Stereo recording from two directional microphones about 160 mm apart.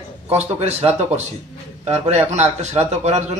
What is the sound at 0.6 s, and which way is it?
A man's voice, 40° right (ahead or behind).